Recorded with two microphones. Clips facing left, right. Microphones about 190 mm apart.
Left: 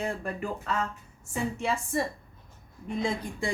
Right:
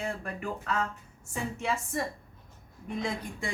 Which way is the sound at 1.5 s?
30° left (ahead or behind).